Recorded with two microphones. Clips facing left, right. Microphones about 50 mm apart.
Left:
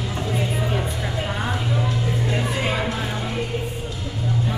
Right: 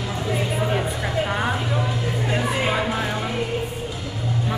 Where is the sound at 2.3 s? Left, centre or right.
Centre.